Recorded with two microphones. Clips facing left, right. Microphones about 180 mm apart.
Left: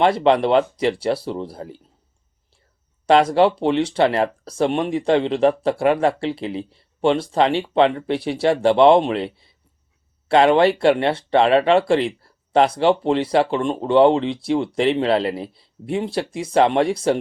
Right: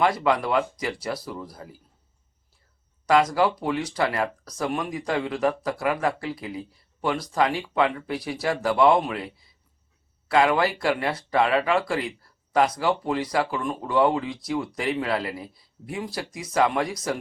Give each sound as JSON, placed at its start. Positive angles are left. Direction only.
{"t": 0.0, "sound": "speech", "side_deg": 30}
{"t": 3.1, "sound": "speech", "side_deg": 30}